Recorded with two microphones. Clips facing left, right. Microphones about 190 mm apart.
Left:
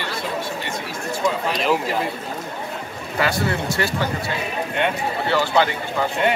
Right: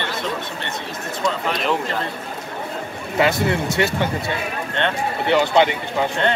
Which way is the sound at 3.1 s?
20° right (ahead or behind).